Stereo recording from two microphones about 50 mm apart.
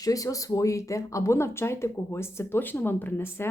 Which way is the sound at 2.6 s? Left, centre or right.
Left.